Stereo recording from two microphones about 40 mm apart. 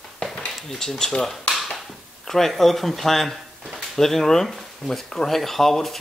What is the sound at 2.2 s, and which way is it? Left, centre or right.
Speech, centre.